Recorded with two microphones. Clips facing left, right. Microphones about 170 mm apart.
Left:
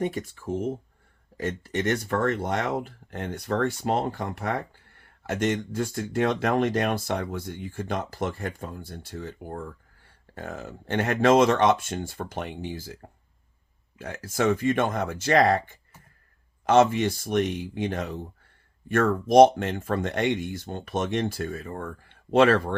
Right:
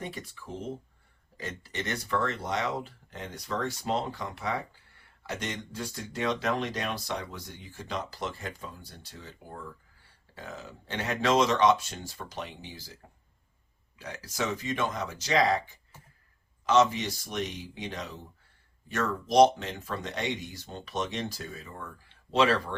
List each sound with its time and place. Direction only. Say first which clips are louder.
0.0 s speech: left 11 dB; 50° left (ahead or behind)